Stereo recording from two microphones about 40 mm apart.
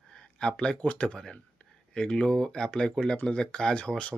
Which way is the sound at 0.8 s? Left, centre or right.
Left.